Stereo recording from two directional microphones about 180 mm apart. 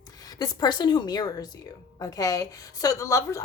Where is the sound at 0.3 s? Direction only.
20° left (ahead or behind).